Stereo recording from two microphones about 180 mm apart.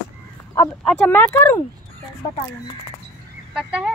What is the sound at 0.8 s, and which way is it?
Speech, 5° left (ahead or behind).